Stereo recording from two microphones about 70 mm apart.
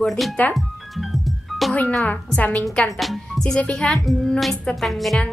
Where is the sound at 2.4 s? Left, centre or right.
Left.